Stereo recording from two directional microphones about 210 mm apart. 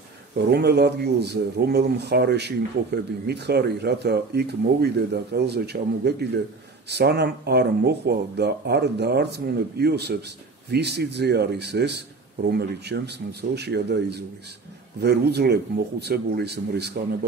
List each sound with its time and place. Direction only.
0.5 s a man's voice: 50° right (ahead or behind)